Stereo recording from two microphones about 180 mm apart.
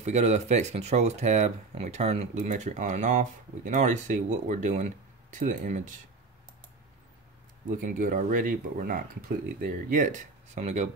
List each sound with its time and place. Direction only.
0.0 s speech: 40° right (ahead or behind)
7.8 s speech: 45° right (ahead or behind)